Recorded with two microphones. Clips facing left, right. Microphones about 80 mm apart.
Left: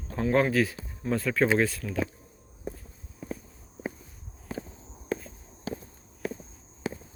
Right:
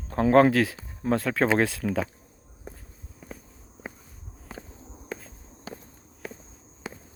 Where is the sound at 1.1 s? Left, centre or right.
Right.